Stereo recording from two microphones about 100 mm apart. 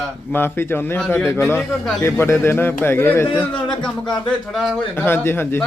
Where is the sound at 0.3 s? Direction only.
25° left (ahead or behind).